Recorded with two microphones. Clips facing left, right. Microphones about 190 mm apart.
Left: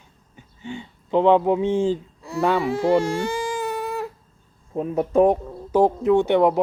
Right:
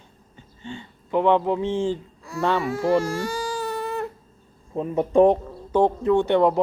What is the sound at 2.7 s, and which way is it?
Speech, 30° left (ahead or behind).